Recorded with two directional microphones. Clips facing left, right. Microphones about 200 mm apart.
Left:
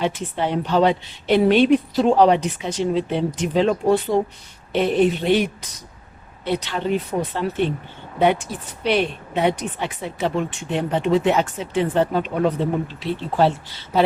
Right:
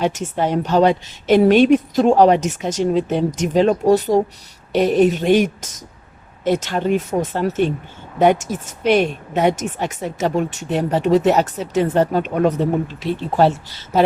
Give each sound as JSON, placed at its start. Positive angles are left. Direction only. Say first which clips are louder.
{"t": 0.0, "sound": "speech", "louder": "right 3 dB", "side_deg": -45}